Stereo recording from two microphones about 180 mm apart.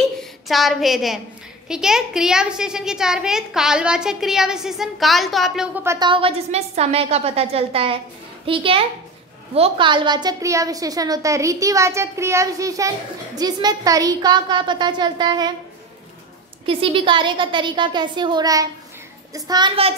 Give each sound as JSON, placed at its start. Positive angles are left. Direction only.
{"t": 0.2, "sound": "a woman's voice", "side_deg": 0}
{"t": 5.9, "sound": "a woman's voice", "side_deg": -25}
{"t": 16.6, "sound": "a woman's voice", "side_deg": -30}